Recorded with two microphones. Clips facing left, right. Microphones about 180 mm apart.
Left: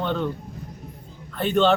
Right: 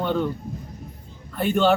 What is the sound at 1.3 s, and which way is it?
Speech, 10° right (ahead or behind).